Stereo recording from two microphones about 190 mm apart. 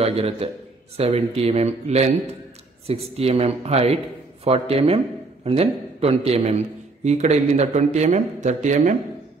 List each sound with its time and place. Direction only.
0.0 s a man's voice: 30° right (ahead or behind)